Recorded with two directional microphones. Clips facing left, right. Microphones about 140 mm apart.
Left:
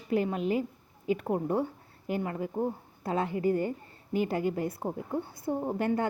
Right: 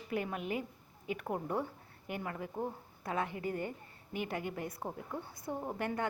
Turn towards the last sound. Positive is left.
turn(degrees=30)  # may be behind; listen again after turning